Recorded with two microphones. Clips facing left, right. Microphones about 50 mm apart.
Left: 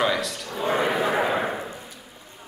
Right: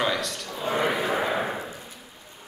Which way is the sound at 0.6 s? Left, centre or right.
Left.